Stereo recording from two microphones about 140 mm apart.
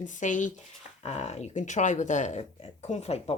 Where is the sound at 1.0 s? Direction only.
50° left (ahead or behind).